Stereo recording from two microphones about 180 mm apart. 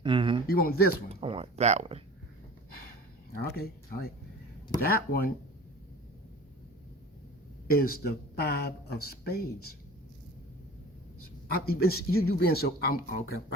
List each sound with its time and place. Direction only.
0.0 s a sound: 30° right (ahead or behind)
0.4 s speech: 55° left (ahead or behind)
1.1 s a sound: 30° right (ahead or behind)
3.3 s speech: 55° left (ahead or behind)
7.7 s speech: 55° left (ahead or behind)
11.5 s speech: 60° left (ahead or behind)